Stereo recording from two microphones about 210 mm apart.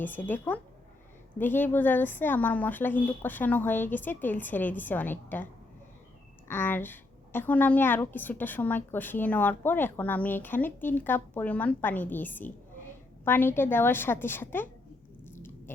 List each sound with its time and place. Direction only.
0.0 s a woman's voice: 10° left (ahead or behind)
6.5 s a woman's voice: 10° left (ahead or behind)
15.2 s chewing: 10° left (ahead or behind)